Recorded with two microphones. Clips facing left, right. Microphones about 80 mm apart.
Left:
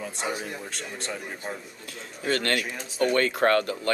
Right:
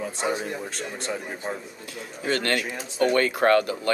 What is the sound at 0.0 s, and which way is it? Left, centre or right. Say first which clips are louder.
Speech: right 4 dB; centre.